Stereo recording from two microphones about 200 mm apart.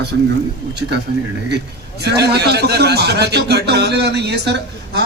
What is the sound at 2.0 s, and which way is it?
Speech, 55° right (ahead or behind).